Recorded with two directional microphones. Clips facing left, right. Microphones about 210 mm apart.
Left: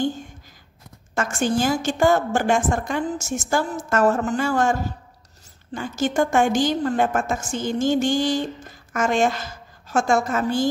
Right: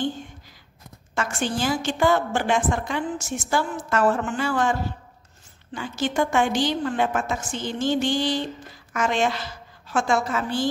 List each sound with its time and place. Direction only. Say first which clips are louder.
1.1 s a woman's voice: left 4 dB; 45° left (ahead or behind)